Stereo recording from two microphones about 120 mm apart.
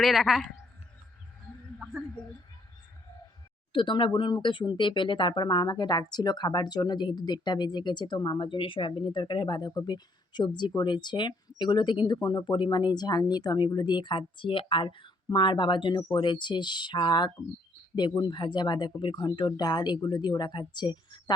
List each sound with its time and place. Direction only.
0.0 s a woman's voice: centre (ahead or behind)
3.7 s speech: 40° left (ahead or behind)